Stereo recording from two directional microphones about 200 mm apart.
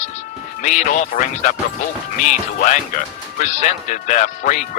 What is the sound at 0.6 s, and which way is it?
A man's voice, 40° left (ahead or behind).